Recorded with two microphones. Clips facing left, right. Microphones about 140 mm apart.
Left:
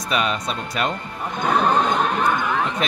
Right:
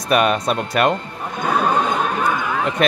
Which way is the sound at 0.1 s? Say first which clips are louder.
Right 7 dB; 55° right (ahead or behind).